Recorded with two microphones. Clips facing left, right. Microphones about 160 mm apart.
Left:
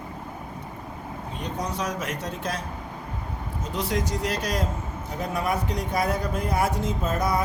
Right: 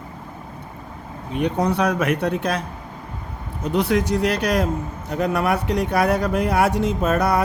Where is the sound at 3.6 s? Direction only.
65° right (ahead or behind).